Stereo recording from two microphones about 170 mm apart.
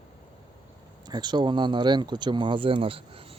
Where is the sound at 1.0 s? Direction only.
25° right (ahead or behind).